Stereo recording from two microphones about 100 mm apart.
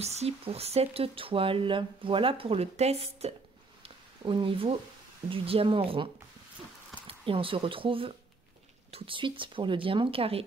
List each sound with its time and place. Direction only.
0.0 s speech: 90° right
4.2 s speech: 55° right (ahead or behind)
7.1 s speech: 65° right (ahead or behind)